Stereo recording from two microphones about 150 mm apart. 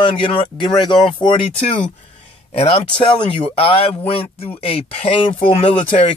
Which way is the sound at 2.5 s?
40° left (ahead or behind).